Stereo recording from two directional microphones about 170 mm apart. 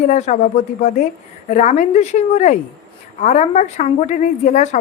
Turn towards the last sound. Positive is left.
turn(degrees=45)  # may be behind; listen again after turning